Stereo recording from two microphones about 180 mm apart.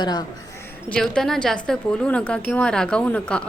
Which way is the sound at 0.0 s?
25° left (ahead or behind).